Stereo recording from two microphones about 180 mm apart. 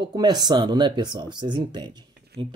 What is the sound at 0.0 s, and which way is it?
Speech, 25° right (ahead or behind).